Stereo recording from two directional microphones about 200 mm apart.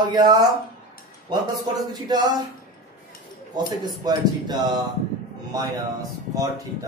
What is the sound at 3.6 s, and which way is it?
Speech, 20° right (ahead or behind).